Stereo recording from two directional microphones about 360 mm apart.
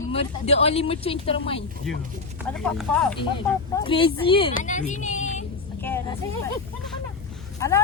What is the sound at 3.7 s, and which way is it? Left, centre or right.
A woman's voice, centre.